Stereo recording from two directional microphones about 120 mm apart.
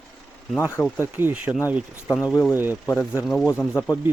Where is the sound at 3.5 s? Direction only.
15° left (ahead or behind).